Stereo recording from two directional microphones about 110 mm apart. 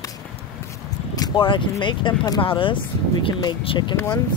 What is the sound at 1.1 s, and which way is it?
Vehicle, 35° left (ahead or behind).